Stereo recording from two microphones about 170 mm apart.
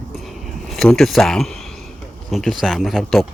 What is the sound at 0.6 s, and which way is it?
Speech, 5° left (ahead or behind).